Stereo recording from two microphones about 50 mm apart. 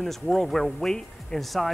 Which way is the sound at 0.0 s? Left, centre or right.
Centre.